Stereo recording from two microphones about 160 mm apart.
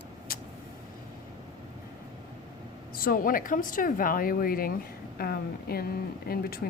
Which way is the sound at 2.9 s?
65° left (ahead or behind).